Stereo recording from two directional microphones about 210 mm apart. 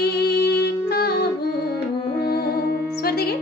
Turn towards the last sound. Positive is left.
turn(degrees=50)  # may be behind; listen again after turning